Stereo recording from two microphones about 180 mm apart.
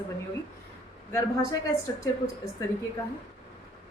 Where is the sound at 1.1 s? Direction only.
20° left (ahead or behind).